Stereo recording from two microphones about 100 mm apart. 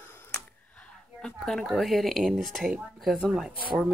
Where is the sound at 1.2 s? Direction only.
5° left (ahead or behind).